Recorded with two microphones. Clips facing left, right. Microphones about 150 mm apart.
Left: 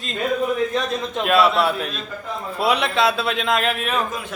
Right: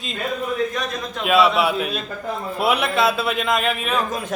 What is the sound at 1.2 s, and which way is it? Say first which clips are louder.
A man's voice: right 1 dB; centre (ahead or behind).